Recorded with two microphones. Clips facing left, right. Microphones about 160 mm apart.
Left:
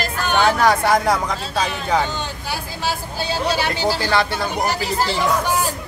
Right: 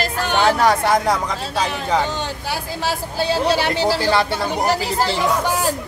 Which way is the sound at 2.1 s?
75° right (ahead or behind).